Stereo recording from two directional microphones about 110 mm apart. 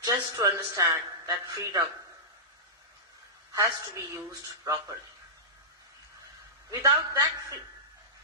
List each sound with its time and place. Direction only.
0.0 s speech: 30° right (ahead or behind)
3.5 s speech: 25° right (ahead or behind)
6.7 s speech: 30° right (ahead or behind)